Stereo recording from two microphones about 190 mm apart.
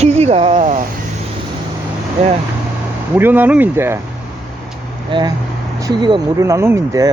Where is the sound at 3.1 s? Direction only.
10° right (ahead or behind).